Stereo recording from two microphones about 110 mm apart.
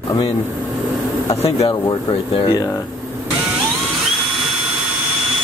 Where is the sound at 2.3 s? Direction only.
45° left (ahead or behind).